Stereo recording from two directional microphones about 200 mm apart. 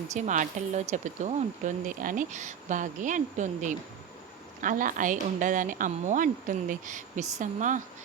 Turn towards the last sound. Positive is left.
turn(degrees=-35)  # may be behind; listen again after turning